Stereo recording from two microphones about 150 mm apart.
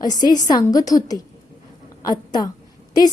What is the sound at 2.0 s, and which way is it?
Speech, 25° left (ahead or behind).